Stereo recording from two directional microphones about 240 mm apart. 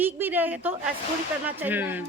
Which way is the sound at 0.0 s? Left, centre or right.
Centre.